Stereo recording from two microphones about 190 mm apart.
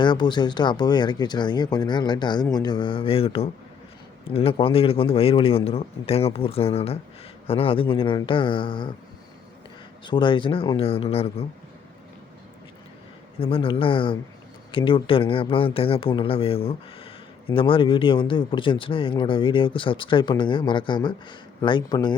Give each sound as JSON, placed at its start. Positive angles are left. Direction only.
{"t": 0.0, "sound": "speech", "side_deg": 25}
{"t": 10.0, "sound": "speech", "side_deg": 25}
{"t": 13.4, "sound": "speech", "side_deg": 30}